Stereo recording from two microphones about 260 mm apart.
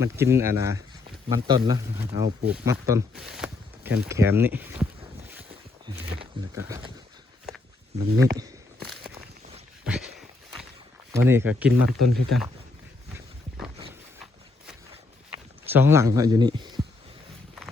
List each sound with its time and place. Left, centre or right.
0.0 s speech: centre
5.3 s boat: centre
6.0 s speech: right
7.9 s speech: centre
9.8 s a sound: centre
11.2 s speech: centre
15.7 s speech: centre